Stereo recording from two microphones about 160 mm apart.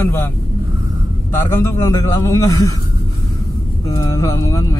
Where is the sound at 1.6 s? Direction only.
20° left (ahead or behind).